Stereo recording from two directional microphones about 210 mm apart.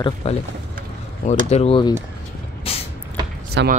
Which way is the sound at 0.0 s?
25° left (ahead or behind).